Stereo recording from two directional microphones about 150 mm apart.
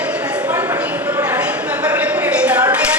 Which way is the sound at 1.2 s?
10° right (ahead or behind).